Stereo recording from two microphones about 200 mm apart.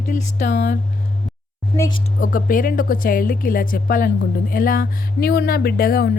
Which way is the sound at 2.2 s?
40° left (ahead or behind).